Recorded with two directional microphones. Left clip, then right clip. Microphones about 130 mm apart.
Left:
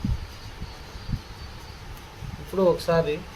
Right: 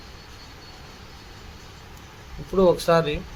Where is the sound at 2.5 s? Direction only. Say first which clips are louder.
Right 3 dB; 40° right (ahead or behind).